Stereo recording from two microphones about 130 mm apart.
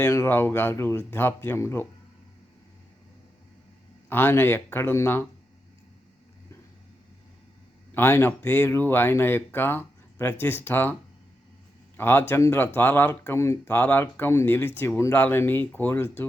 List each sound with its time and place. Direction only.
0.0 s speech: 20° left (ahead or behind)
4.1 s speech: 15° left (ahead or behind)
7.9 s speech: 15° left (ahead or behind)
11.9 s speech: 15° left (ahead or behind)